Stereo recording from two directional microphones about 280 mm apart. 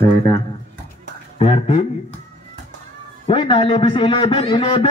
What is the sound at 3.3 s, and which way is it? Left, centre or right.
A man's voice, centre.